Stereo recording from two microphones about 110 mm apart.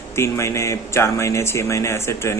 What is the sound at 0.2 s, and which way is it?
Speech, 25° left (ahead or behind).